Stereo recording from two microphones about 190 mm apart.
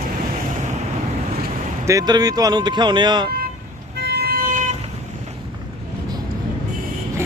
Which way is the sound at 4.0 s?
60° right (ahead or behind).